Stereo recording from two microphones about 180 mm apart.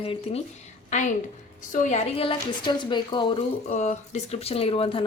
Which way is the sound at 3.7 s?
40° left (ahead or behind).